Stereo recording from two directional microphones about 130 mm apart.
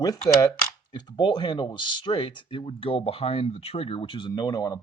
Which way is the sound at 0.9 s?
35° left (ahead or behind).